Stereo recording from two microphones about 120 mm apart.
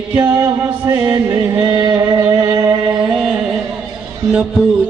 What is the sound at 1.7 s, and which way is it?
Music, 35° right (ahead or behind).